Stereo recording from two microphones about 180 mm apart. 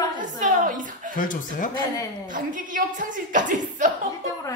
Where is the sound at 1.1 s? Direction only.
50° left (ahead or behind).